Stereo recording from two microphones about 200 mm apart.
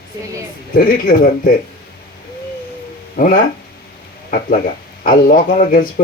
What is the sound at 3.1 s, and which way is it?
Speech, 45° left (ahead or behind).